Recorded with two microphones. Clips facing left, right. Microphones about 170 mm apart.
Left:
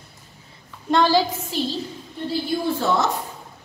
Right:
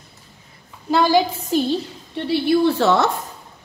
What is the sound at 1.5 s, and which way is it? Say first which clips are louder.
Speech: right 7 dB; 50° right (ahead or behind).